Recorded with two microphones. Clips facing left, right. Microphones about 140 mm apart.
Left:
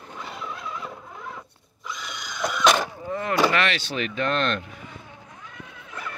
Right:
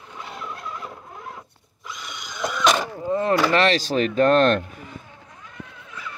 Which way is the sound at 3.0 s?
30° right (ahead or behind).